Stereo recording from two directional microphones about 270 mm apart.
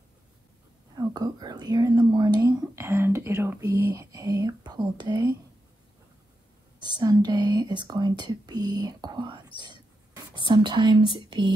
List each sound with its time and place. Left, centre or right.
0.9 s speech: centre
7.0 s speech: centre
9.6 s whispering: centre
11.1 s speech: centre